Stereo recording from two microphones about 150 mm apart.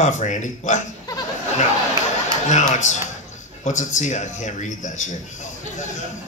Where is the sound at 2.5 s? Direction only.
55° left (ahead or behind).